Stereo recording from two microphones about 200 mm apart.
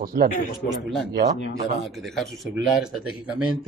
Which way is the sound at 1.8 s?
Centre (ahead or behind).